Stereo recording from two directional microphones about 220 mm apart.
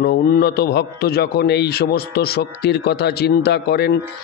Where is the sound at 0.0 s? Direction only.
45° left (ahead or behind).